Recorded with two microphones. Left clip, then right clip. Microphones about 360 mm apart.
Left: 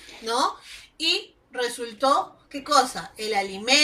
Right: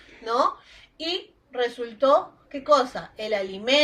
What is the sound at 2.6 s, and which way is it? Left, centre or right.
A woman's voice, right.